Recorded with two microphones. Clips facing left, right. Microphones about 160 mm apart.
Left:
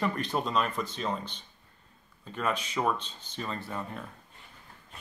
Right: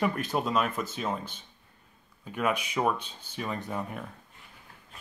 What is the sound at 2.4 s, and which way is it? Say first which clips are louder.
Speech: right 2 dB; 10° right (ahead or behind).